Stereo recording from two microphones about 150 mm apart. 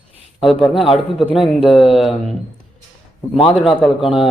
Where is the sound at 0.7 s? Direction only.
35° left (ahead or behind).